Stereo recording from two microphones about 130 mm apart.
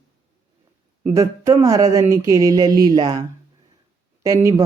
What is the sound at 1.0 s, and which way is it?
Speech, 25° right (ahead or behind).